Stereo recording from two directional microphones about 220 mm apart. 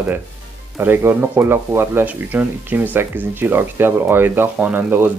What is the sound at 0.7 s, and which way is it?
Speech, 10° right (ahead or behind).